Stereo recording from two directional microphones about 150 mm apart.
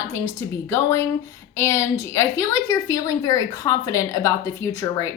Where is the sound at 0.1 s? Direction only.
20° left (ahead or behind).